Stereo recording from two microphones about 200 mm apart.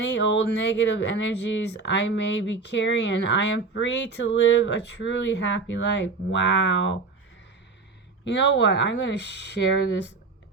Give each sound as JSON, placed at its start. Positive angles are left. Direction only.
{"t": 0.0, "sound": "speech", "side_deg": 60}
{"t": 8.2, "sound": "speech", "side_deg": 65}